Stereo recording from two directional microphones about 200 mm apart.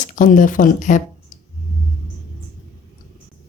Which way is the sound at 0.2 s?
40° left (ahead or behind).